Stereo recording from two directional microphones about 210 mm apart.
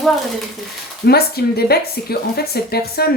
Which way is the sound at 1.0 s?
50° left (ahead or behind).